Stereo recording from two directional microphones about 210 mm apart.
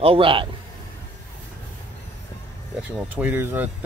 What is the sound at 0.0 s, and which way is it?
Speech, 25° right (ahead or behind).